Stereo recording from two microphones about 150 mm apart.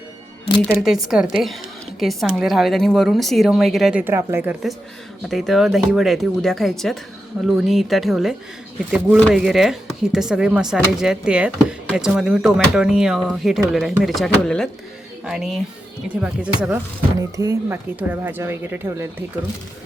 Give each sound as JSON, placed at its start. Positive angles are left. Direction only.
{"t": 0.6, "sound": "speech", "side_deg": -5}
{"t": 4.0, "sound": "speech", "side_deg": -15}
{"t": 5.3, "sound": "speech", "side_deg": 0}
{"t": 17.3, "sound": "speech", "side_deg": -20}